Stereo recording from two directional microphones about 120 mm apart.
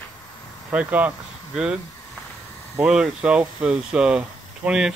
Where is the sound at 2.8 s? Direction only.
5° right (ahead or behind).